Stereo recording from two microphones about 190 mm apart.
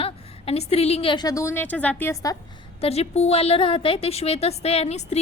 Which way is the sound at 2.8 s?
30° left (ahead or behind).